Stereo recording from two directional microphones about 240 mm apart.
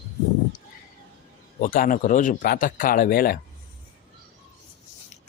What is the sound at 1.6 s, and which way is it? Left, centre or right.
A man's voice, left.